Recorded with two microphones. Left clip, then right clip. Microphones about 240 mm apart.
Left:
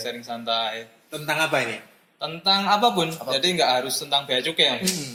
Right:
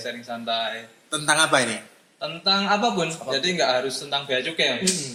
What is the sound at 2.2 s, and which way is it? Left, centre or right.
A man's voice, left.